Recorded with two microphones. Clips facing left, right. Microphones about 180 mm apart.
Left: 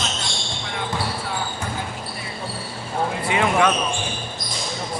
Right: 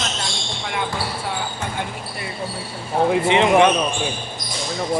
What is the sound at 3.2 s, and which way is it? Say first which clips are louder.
Speech: right 4 dB; 25° right (ahead or behind).